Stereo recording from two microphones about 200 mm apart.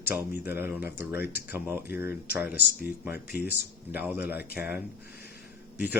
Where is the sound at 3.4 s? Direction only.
10° right (ahead or behind).